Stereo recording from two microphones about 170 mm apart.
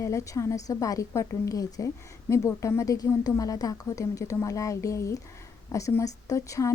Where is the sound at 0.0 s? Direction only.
20° left (ahead or behind).